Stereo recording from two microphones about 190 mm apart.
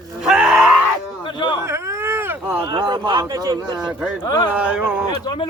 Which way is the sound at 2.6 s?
25° right (ahead or behind).